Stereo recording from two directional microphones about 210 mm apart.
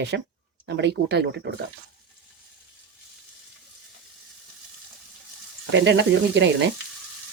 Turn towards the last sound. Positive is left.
turn(degrees=-60)  # may be behind; listen again after turning